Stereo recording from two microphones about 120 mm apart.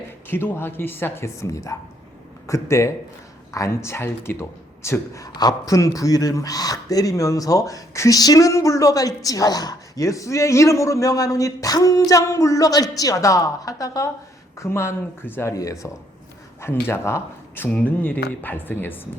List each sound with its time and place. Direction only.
0.3 s speech: 20° left (ahead or behind)